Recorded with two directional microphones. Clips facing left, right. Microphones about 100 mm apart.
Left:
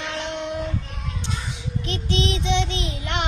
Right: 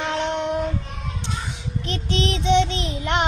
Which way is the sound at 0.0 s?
35° right (ahead or behind).